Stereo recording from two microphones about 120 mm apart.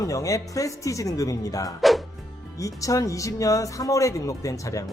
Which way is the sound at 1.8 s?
Centre (ahead or behind).